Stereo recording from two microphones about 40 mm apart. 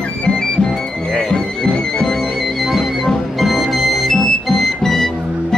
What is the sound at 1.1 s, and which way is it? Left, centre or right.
Music, centre.